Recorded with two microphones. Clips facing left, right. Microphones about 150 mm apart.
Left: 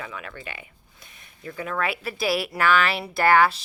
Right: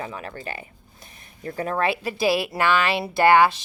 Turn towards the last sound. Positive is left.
turn(degrees=-20)  # may be behind; listen again after turning